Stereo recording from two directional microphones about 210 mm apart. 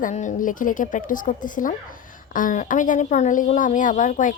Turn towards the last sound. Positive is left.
turn(degrees=40)  # may be behind; listen again after turning